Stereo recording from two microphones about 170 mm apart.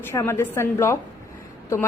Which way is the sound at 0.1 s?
15° left (ahead or behind).